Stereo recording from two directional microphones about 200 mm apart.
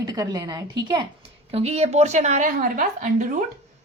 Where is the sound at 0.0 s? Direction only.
20° right (ahead or behind).